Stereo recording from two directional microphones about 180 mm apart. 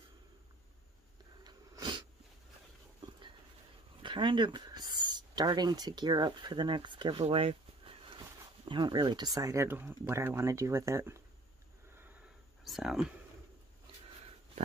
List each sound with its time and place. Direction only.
1.4 s a sound: 25° right (ahead or behind)
4.0 s speech: 25° right (ahead or behind)
12.6 s speech: centre (ahead or behind)